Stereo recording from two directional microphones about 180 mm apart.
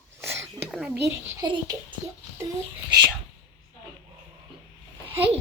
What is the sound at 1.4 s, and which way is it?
Speech, 25° right (ahead or behind).